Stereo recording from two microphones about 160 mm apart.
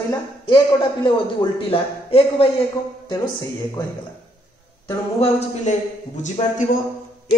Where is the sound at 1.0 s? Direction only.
35° left (ahead or behind).